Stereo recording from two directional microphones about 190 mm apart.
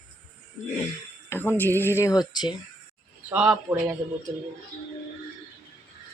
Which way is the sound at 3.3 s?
5° right (ahead or behind).